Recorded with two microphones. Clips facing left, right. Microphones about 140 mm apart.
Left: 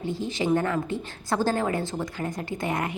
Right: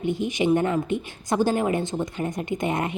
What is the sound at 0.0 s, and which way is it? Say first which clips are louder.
A woman's voice: right 4 dB; 20° right (ahead or behind).